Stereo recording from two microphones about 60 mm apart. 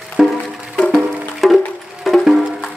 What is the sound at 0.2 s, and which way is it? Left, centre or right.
Music, centre.